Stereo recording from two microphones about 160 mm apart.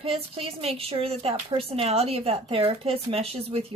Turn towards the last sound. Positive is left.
turn(degrees=-40)  # may be behind; listen again after turning